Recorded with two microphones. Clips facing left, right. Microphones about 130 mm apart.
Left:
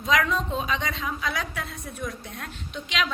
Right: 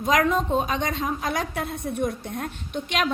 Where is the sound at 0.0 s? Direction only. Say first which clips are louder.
Right 3 dB; 45° right (ahead or behind).